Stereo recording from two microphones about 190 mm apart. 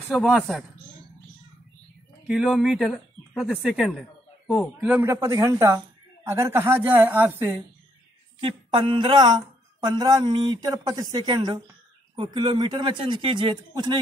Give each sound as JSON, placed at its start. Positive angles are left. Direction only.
{"t": 0.1, "sound": "speech", "side_deg": 0}
{"t": 2.2, "sound": "a woman's voice", "side_deg": -5}
{"t": 8.4, "sound": "speech", "side_deg": -25}